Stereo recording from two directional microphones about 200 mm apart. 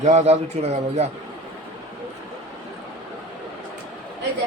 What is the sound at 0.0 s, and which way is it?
A man's voice, 35° right (ahead or behind).